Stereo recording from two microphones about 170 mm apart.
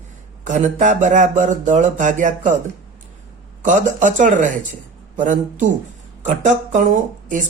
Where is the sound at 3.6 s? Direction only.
50° right (ahead or behind).